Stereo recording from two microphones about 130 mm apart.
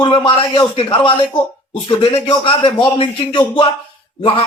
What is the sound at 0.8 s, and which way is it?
Speech, 40° left (ahead or behind).